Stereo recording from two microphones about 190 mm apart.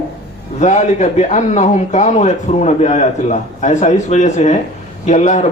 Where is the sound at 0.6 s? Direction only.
35° left (ahead or behind).